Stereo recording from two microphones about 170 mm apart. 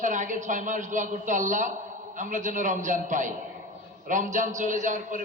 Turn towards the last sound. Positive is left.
turn(degrees=-45)  # may be behind; listen again after turning